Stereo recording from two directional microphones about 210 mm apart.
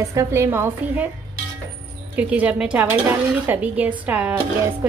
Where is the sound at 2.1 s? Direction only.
5° right (ahead or behind).